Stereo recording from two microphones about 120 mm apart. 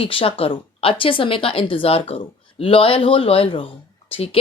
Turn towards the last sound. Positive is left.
turn(degrees=50)  # may be behind; listen again after turning